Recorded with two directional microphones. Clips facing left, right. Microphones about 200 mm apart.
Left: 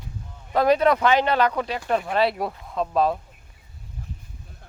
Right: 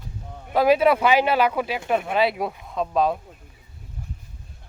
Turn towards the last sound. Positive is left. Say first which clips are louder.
# even
turn(degrees=0)  # may be behind; listen again after turning